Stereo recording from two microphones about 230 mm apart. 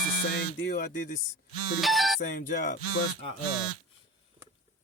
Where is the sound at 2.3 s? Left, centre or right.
Left.